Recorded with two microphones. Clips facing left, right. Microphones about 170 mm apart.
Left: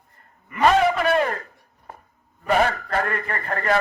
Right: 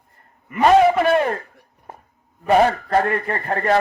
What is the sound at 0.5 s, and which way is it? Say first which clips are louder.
Speech: right 4 dB; 25° right (ahead or behind).